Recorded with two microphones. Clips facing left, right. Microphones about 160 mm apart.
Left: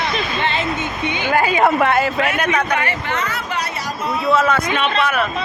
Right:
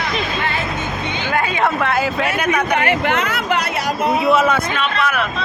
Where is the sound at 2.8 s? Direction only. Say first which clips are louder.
Right 5 dB; 60° right (ahead or behind).